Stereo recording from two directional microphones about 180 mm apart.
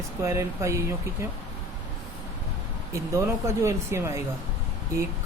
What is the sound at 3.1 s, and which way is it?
Speech, 15° right (ahead or behind).